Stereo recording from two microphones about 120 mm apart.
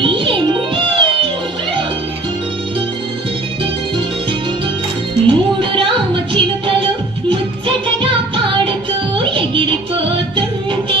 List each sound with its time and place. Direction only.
0.0 s music: 45° right (ahead or behind)
5.2 s music: 45° right (ahead or behind)